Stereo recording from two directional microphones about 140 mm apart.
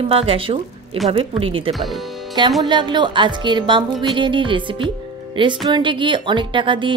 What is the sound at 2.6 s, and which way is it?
A woman's voice, 35° right (ahead or behind).